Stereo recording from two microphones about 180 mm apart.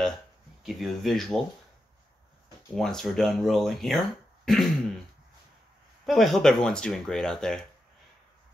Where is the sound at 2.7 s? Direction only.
Centre (ahead or behind).